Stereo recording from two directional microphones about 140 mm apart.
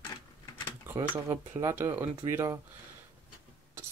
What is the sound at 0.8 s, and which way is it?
Speech, 15° right (ahead or behind).